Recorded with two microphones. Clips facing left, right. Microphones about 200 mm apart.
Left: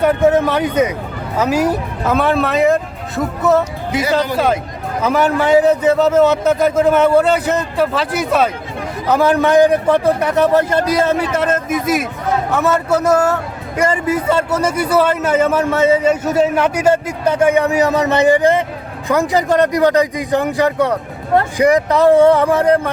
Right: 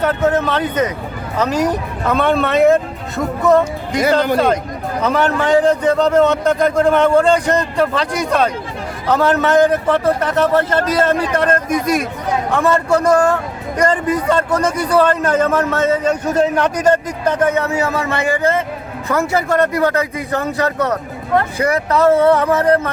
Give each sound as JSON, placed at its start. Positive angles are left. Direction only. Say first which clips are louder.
{"t": 0.0, "sound": "a man's voice", "louder": "left 3 dB", "side_deg": 15}